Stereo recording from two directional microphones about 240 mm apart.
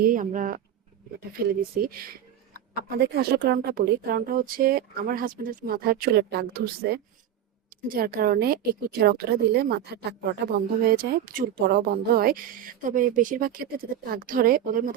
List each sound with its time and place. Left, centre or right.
0.0 s speech: right
1.9 s speech: right